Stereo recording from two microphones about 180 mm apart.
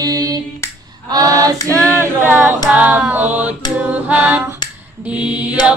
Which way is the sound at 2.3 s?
10° right (ahead or behind).